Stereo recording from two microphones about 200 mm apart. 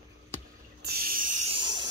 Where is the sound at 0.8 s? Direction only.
50° right (ahead or behind); by 1.9 s 20° right (ahead or behind).